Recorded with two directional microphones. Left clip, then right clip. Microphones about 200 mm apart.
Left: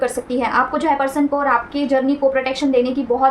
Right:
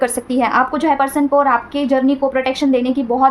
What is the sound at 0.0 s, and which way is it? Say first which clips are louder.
A woman's voice: right 3 dB; 40° right (ahead or behind).